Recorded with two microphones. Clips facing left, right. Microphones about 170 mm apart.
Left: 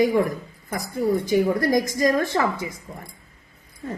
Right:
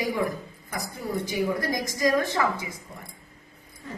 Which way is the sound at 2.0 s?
50° left (ahead or behind).